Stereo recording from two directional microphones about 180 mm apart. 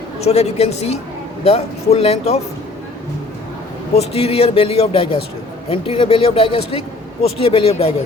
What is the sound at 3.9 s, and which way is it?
Speech, 35° left (ahead or behind).